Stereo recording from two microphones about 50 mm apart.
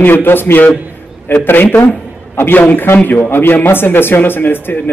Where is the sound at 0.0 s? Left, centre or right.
Left.